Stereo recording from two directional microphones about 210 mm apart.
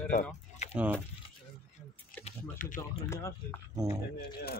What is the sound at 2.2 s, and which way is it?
Speech, 40° left (ahead or behind).